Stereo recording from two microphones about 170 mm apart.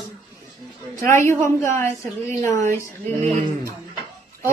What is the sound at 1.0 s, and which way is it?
A woman's voice, 15° left (ahead or behind).